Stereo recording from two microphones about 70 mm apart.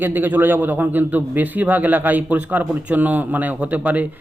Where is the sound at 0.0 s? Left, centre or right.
Right.